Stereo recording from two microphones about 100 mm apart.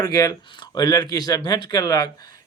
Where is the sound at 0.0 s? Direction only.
35° left (ahead or behind).